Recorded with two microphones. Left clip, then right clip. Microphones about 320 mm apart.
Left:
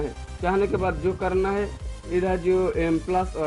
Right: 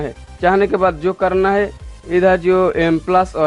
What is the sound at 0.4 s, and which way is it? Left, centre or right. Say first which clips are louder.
Speech: right 10 dB; right.